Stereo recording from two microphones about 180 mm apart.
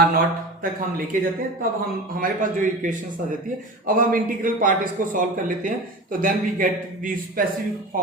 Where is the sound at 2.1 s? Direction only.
45° right (ahead or behind).